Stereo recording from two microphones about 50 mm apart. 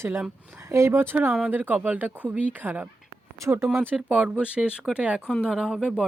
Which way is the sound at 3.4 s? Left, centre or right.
Right.